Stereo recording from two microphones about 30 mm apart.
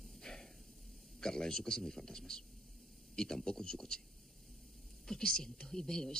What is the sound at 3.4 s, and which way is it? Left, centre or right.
Speech, left.